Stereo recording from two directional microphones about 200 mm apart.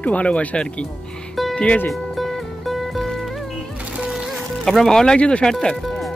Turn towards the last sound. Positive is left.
turn(degrees=0)  # may be behind; listen again after turning